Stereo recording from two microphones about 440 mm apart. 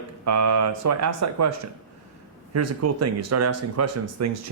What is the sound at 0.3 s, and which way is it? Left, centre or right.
Speech, right.